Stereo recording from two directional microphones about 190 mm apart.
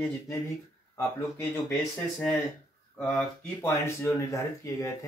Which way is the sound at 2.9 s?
10° left (ahead or behind).